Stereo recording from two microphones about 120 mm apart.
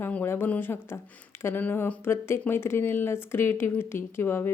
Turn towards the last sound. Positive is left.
turn(degrees=20)  # may be behind; listen again after turning